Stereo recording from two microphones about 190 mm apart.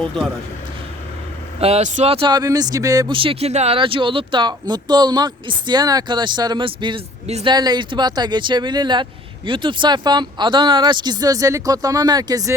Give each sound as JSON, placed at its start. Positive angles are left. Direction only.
{"t": 1.6, "sound": "speech", "side_deg": -35}